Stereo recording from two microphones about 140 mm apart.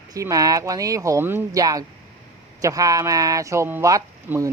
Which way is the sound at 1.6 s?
25° right (ahead or behind).